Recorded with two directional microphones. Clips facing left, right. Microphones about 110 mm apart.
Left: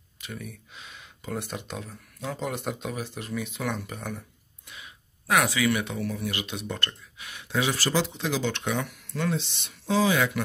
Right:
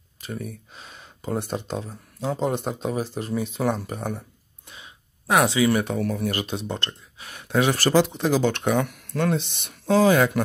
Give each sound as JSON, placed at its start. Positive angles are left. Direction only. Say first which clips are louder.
{"t": 0.2, "sound": "speech", "louder": "right 6 dB", "side_deg": -40}
{"t": 4.6, "sound": "a sound", "louder": "right 1 dB", "side_deg": -30}
{"t": 5.8, "sound": "speech", "louder": "right 6 dB", "side_deg": -45}
{"t": 7.2, "sound": "speech", "louder": "right 6 dB", "side_deg": -45}